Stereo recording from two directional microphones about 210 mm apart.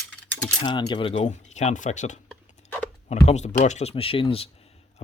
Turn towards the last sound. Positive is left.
turn(degrees=25)  # may be behind; listen again after turning